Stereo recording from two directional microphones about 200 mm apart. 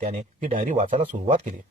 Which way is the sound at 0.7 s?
30° right (ahead or behind).